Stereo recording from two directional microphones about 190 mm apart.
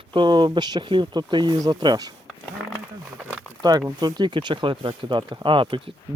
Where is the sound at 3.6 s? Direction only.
20° right (ahead or behind).